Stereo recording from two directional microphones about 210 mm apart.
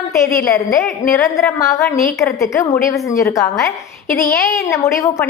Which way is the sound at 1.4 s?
15° left (ahead or behind).